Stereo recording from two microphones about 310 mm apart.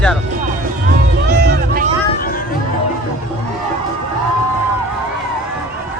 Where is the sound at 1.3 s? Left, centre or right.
Right.